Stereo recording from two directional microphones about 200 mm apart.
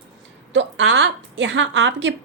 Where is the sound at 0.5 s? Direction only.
65° right (ahead or behind).